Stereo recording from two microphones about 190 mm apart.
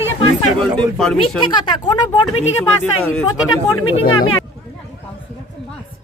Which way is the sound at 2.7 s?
10° left (ahead or behind).